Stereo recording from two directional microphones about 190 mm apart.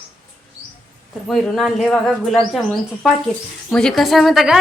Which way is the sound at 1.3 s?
Centre (ahead or behind).